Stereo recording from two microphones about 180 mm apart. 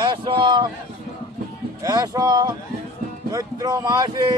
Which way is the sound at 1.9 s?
20° right (ahead or behind).